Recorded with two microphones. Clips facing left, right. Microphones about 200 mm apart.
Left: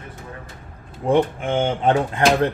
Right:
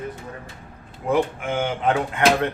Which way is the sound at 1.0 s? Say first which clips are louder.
Left 3 dB; 30° left (ahead or behind).